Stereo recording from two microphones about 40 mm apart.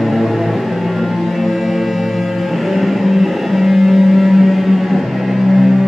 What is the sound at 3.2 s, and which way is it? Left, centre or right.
Music, centre.